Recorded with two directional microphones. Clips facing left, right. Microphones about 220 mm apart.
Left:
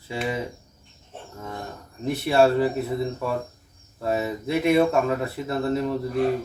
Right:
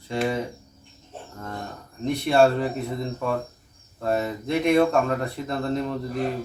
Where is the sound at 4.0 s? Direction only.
5° left (ahead or behind).